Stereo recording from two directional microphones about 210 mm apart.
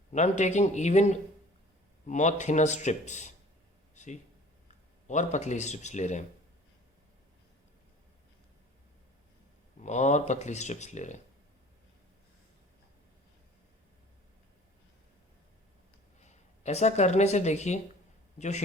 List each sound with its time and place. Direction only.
0.1 s speech: 35° left (ahead or behind)
3.9 s a sound: 35° left (ahead or behind)
5.0 s speech: 35° left (ahead or behind)
9.8 s speech: 35° left (ahead or behind)
16.2 s speech: 35° left (ahead or behind)